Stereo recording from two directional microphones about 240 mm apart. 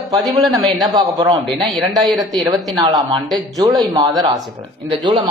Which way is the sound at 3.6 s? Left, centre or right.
Centre.